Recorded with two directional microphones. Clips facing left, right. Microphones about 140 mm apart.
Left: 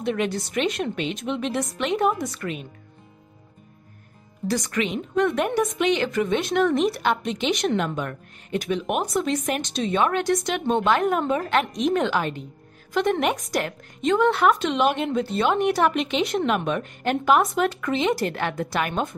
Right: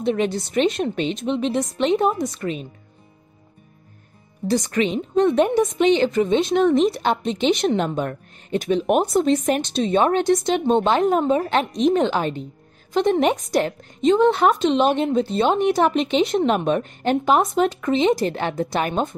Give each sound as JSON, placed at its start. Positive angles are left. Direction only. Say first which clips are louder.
{"t": 0.0, "sound": "a woman's voice", "louder": "right 4 dB", "side_deg": -25}
{"t": 4.5, "sound": "a woman's voice", "louder": "right 4 dB", "side_deg": -25}